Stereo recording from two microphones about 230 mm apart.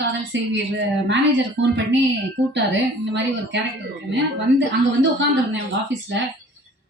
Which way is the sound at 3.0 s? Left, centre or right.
Right.